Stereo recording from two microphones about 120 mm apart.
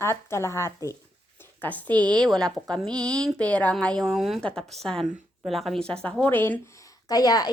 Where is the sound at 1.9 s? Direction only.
35° right (ahead or behind).